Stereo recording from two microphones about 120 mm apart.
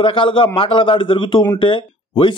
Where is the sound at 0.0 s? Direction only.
45° left (ahead or behind).